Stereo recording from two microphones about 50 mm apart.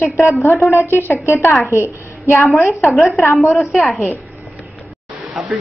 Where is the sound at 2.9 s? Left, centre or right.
Centre.